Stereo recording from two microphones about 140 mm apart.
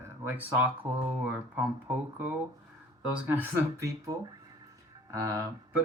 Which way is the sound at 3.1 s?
10° right (ahead or behind).